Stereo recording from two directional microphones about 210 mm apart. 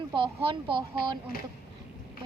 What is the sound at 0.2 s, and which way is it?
A woman's voice, 25° right (ahead or behind).